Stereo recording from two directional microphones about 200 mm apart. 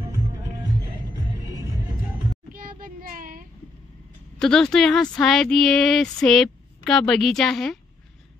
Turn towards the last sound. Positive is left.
turn(degrees=0)  # may be behind; listen again after turning